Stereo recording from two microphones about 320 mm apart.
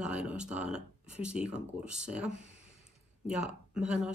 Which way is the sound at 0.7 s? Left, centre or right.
Centre.